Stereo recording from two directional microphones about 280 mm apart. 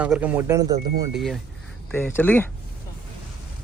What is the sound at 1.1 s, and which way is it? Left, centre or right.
A man's voice, centre.